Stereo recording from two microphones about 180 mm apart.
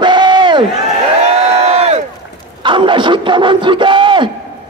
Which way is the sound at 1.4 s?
35° right (ahead or behind).